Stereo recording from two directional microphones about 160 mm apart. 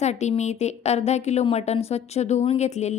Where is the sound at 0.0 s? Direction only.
45° left (ahead or behind).